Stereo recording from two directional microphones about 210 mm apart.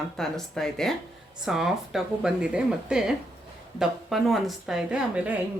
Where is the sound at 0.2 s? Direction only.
Centre (ahead or behind).